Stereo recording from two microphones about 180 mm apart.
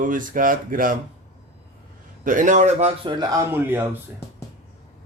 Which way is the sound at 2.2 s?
45° right (ahead or behind).